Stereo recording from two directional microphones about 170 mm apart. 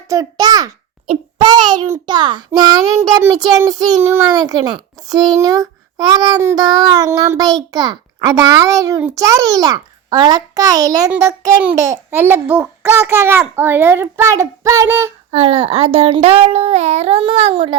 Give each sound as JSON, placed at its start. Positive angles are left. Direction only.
{"t": 0.1, "sound": "a child's voice", "side_deg": -20}
{"t": 1.0, "sound": "child singing", "side_deg": -35}
{"t": 1.9, "sound": "a child's voice", "side_deg": -25}
{"t": 15.3, "sound": "a child's voice", "side_deg": -35}